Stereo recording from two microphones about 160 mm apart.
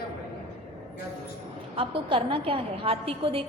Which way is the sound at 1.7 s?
30° right (ahead or behind).